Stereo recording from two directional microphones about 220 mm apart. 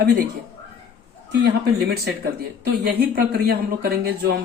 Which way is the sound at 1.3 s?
45° right (ahead or behind).